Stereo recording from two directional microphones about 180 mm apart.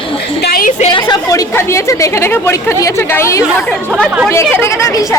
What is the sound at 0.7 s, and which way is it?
Speech, 30° left (ahead or behind).